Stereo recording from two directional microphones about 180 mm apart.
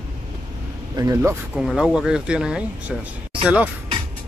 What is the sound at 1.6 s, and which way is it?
Speech, 5° right (ahead or behind).